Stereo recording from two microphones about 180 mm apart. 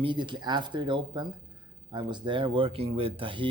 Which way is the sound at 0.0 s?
25° right (ahead or behind).